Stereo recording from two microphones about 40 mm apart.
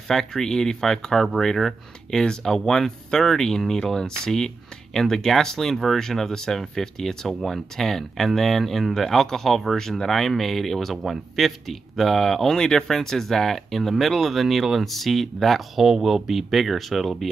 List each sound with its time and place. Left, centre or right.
0.1 s speech: centre
12.5 s speech: centre